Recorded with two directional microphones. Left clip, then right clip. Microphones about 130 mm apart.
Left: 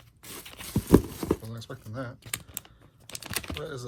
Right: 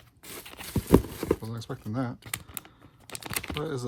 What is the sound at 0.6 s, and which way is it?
Horse, 5° right (ahead or behind).